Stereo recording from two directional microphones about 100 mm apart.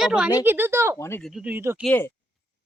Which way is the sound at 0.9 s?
30° left (ahead or behind).